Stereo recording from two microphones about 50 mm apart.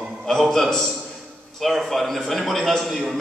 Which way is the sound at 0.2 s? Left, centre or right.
Centre.